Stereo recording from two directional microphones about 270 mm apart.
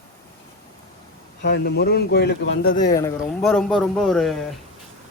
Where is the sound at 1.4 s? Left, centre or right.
Left.